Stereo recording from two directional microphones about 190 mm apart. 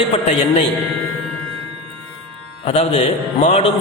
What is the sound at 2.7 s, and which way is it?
A man's voice, 30° left (ahead or behind).